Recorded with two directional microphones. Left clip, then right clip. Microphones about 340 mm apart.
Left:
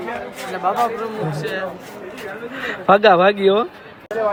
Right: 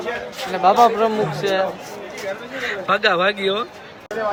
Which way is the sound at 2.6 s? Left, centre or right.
Centre.